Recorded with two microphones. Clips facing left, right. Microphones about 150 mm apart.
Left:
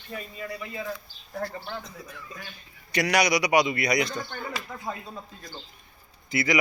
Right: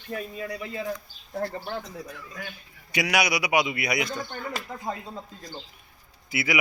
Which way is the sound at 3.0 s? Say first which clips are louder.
Left 2 dB; 5° right (ahead or behind).